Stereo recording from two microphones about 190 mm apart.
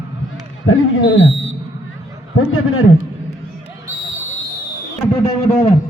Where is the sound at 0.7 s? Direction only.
90° left.